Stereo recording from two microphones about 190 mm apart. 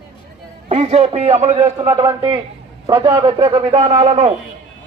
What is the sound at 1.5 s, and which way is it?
Speech, 10° right (ahead or behind).